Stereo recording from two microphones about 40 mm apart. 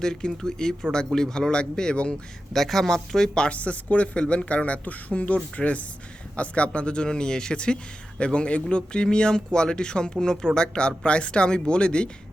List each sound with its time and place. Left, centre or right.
0.0 s speech: centre
2.5 s speech: centre
3.5 s speech: left